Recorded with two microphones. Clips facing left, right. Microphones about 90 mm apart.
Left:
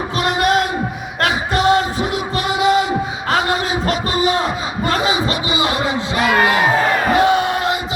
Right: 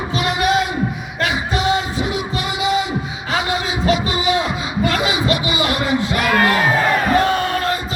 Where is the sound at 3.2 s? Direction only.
50° left (ahead or behind); by 6.7 s 20° left (ahead or behind).